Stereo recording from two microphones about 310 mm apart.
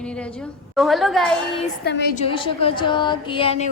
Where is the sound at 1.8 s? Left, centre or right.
Left.